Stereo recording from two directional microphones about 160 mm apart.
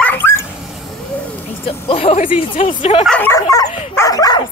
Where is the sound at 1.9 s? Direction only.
35° left (ahead or behind).